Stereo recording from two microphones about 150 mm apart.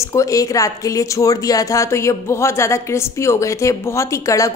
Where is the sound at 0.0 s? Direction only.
20° left (ahead or behind).